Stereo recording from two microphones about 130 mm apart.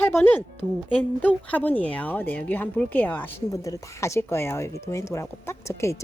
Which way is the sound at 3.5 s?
25° left (ahead or behind).